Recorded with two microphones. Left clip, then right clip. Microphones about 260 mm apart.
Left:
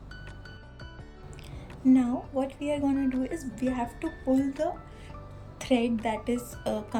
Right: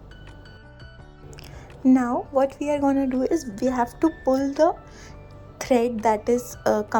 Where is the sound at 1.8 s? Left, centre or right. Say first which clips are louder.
Right 4 dB; right.